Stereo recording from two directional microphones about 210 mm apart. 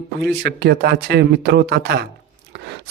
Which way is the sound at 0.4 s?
50° right (ahead or behind).